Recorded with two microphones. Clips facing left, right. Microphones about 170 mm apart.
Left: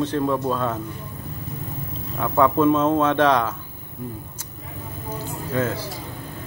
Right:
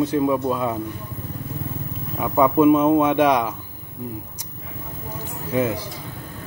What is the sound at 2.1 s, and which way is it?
Speech, 15° right (ahead or behind).